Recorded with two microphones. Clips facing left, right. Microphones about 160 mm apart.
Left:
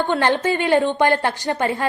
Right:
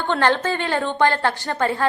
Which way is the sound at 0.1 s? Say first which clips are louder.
Right 4 dB; 15° left (ahead or behind).